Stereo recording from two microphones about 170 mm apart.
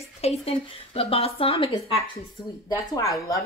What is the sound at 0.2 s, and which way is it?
Speech, 35° left (ahead or behind).